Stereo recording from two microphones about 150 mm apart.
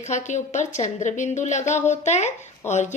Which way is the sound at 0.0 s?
55° left (ahead or behind).